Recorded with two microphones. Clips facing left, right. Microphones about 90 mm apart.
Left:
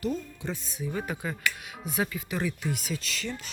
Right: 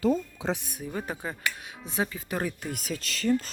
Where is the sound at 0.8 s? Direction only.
35° right (ahead or behind).